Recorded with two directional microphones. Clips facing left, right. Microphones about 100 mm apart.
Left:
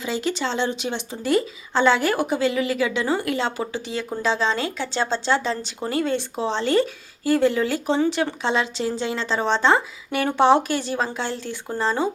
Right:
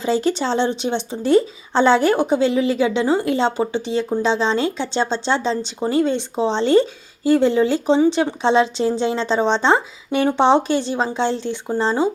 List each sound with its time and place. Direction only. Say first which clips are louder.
0.0 s speech: right 6 dB; 35° right (ahead or behind)